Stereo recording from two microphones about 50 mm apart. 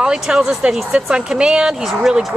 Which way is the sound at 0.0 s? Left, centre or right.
Centre.